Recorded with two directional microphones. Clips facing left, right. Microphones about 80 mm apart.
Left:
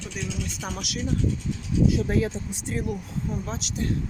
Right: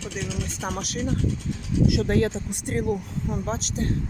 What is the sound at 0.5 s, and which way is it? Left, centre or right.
Speech, right.